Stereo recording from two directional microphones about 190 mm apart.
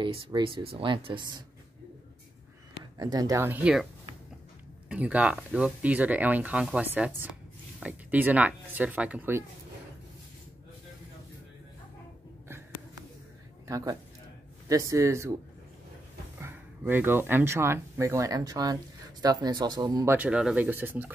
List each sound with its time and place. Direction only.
0.0 s speech: 25° right (ahead or behind)
3.0 s speech: 20° right (ahead or behind)
4.8 s speech: 5° right (ahead or behind)
12.4 s a sound: 15° right (ahead or behind)
13.7 s speech: 15° right (ahead or behind)
16.3 s speech: 10° right (ahead or behind)
20.2 s speech: 5° right (ahead or behind)